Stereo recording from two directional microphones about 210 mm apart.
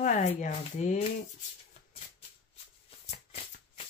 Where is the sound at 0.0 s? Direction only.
35° left (ahead or behind).